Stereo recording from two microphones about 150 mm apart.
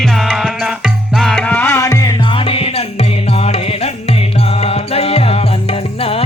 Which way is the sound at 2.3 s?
40° left (ahead or behind).